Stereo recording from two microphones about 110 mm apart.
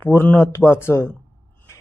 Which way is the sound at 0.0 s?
20° left (ahead or behind).